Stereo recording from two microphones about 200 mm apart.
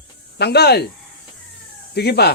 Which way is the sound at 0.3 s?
55° left (ahead or behind).